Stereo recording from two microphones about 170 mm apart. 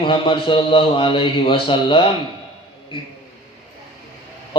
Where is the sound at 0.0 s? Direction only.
30° left (ahead or behind).